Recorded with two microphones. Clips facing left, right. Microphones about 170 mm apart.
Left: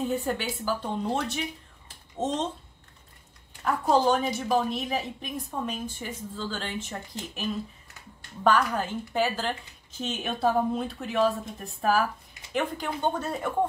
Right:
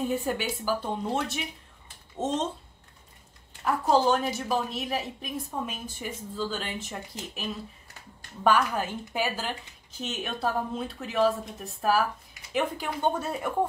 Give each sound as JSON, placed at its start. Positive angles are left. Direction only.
{"t": 0.1, "sound": "speech", "side_deg": -10}
{"t": 3.6, "sound": "a woman's voice", "side_deg": 0}
{"t": 8.5, "sound": "a woman's voice", "side_deg": -10}